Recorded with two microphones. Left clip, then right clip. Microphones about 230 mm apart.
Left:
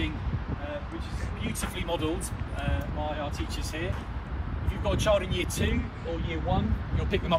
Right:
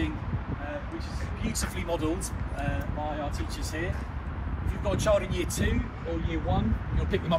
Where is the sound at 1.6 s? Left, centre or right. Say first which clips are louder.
Even; centre.